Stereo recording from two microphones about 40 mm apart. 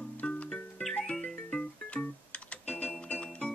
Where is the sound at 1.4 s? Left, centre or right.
Left.